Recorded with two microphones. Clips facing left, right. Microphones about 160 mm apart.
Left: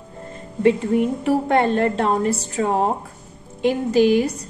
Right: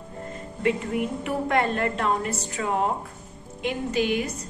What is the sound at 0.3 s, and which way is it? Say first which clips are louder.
Speech: left 8 dB; 30° left (ahead or behind).